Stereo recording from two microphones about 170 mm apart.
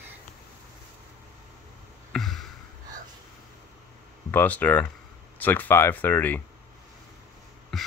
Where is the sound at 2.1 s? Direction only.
Centre (ahead or behind).